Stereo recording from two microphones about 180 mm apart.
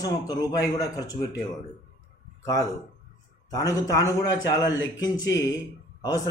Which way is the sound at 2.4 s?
20° left (ahead or behind).